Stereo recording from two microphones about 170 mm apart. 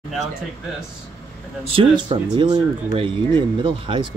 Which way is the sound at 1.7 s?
30° right (ahead or behind).